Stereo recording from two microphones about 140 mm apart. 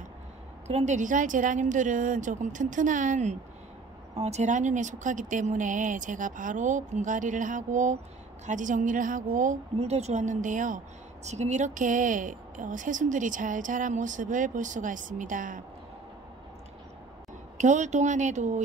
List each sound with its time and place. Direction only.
0.7 s speech: 50° right (ahead or behind)
4.1 s speech: 50° right (ahead or behind); by 10.8 s 65° right (ahead or behind)
11.2 s a woman's voice: 55° right (ahead or behind); by 15.6 s 70° right (ahead or behind)
17.6 s speech: 60° right (ahead or behind)